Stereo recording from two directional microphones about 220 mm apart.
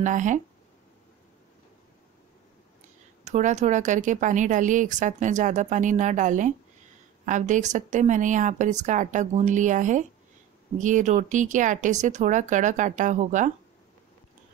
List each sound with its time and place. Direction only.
0.0 s a woman's voice: 35° right (ahead or behind)
3.3 s a woman's voice: 30° right (ahead or behind)